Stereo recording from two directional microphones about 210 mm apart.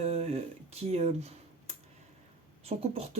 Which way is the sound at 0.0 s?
30° right (ahead or behind).